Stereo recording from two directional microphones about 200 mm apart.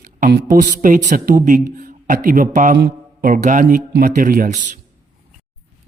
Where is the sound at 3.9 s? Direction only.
45° right (ahead or behind).